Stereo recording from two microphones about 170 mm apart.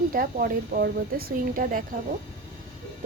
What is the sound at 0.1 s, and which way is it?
Speech, 55° right (ahead or behind).